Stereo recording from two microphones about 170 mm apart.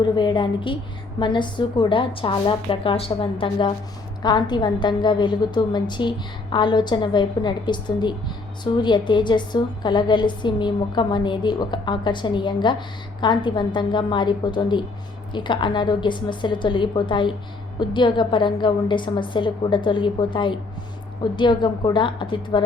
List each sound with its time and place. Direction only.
0.0 s a woman's voice: 25° left (ahead or behind)